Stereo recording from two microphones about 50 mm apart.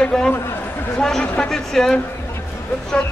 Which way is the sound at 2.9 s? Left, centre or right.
Left.